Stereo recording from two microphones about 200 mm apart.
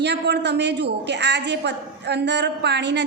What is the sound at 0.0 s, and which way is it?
A man's voice, 60° right (ahead or behind).